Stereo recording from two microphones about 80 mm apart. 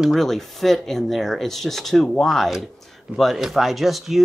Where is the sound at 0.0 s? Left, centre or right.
Centre.